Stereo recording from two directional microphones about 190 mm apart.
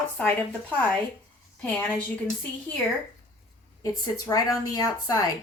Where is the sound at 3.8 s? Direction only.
20° left (ahead or behind).